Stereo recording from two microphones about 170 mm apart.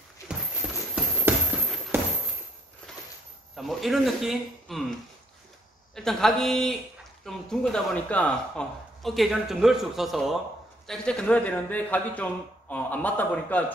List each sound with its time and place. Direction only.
0.9 s a sound: 10° right (ahead or behind)
3.5 s speech: centre (ahead or behind)
5.9 s a man's voice: 5° left (ahead or behind)